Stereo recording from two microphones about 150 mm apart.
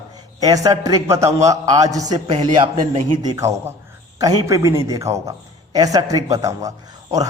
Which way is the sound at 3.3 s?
20° right (ahead or behind).